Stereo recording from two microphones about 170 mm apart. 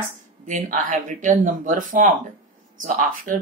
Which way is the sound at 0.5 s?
50° right (ahead or behind).